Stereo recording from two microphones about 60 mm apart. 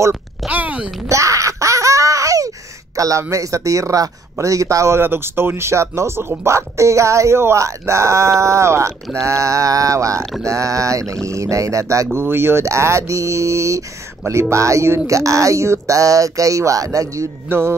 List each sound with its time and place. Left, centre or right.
0.5 s a sound: right
1.0 s baby laughter: right
3.0 s speech: right
12.1 s speech: right
12.6 s speech: right
17.5 s speech: right